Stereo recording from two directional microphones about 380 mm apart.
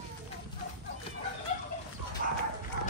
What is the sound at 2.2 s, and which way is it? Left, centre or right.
Horse, right.